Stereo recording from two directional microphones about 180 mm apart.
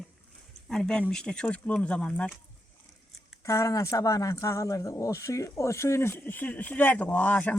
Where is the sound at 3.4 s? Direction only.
20° left (ahead or behind).